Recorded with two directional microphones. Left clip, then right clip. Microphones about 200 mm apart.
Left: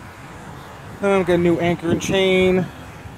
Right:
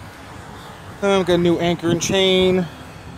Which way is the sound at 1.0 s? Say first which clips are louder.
Even; 10° right (ahead or behind).